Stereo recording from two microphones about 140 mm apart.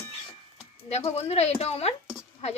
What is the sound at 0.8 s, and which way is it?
Speech, 50° left (ahead or behind).